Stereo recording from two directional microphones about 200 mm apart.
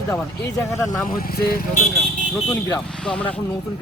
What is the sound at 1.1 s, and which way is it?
Speech, 50° left (ahead or behind).